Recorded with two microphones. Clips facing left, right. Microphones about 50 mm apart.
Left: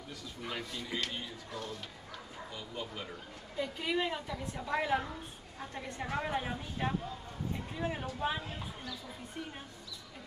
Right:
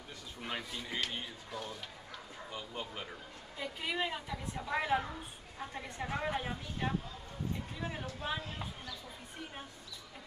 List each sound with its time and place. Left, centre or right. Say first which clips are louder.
0.6 s a woman's voice: left 1 dB; centre
2.5 s speech: even; right
3.5 s a woman's voice: left 3 dB; centre